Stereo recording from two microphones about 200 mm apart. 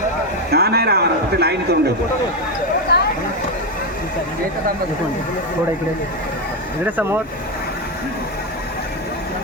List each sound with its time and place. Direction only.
0.5 s a man's voice: 50° right (ahead or behind)
2.9 s a sound: 55° left (ahead or behind)
6.8 s speech: 10° right (ahead or behind)